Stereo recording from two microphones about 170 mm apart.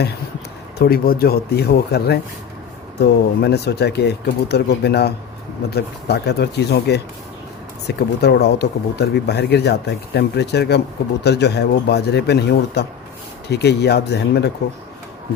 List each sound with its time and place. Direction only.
0.8 s speech: 60° left (ahead or behind); by 14.5 s 75° left (ahead or behind)